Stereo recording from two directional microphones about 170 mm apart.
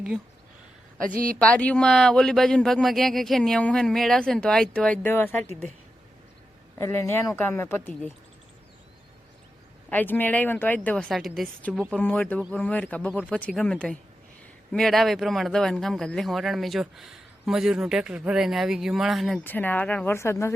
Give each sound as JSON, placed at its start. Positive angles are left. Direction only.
{"t": 1.1, "sound": "speech", "side_deg": -55}
{"t": 1.4, "sound": "speech", "side_deg": 5}
{"t": 6.7, "sound": "speech", "side_deg": 15}
{"t": 9.9, "sound": "speech", "side_deg": 10}
{"t": 19.5, "sound": "speech", "side_deg": 10}